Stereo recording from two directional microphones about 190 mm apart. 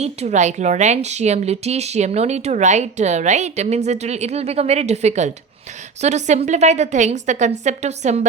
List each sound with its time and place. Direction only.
0.0 s a woman's voice: 35° right (ahead or behind)